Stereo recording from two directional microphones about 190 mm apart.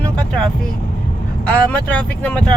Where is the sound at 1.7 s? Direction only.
5° left (ahead or behind).